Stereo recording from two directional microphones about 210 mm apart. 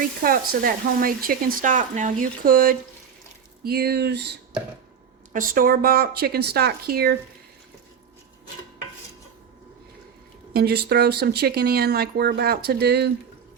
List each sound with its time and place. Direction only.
0.2 s speech: 45° right (ahead or behind)
5.3 s speech: 40° right (ahead or behind)
10.5 s speech: 50° right (ahead or behind)